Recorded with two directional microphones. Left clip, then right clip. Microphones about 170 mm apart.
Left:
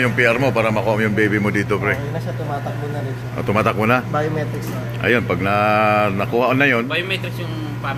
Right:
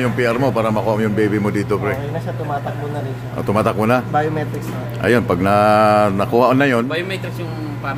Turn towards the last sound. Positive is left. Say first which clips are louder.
# left 1 dB
turn(degrees=-70)  # may be behind; listen again after turning